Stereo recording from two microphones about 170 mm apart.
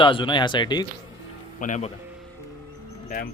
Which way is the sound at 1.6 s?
45° left (ahead or behind).